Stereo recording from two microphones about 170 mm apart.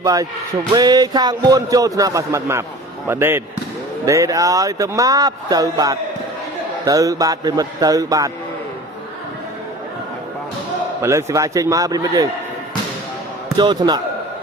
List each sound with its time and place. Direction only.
0.0 s speech: 20° right (ahead or behind)
11.0 s speech: 15° right (ahead or behind)
13.6 s speech: 25° right (ahead or behind)